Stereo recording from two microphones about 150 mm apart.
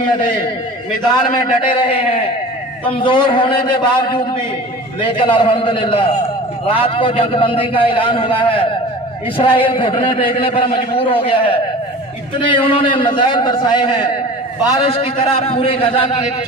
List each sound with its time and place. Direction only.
1.1 s a man's voice: 30° left (ahead or behind)